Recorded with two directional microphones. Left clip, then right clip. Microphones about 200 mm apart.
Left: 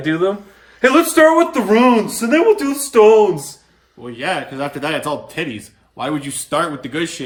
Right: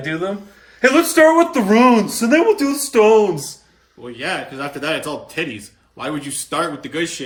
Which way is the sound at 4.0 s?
50° left (ahead or behind).